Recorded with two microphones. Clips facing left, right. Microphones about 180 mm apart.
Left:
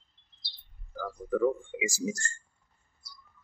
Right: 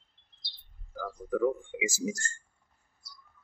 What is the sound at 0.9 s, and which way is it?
Speech, 5° right (ahead or behind).